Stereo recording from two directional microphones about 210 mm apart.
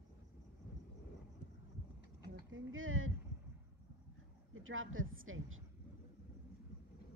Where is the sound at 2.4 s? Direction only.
70° right (ahead or behind).